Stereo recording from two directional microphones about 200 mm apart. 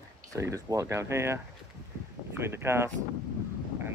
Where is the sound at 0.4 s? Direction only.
15° right (ahead or behind).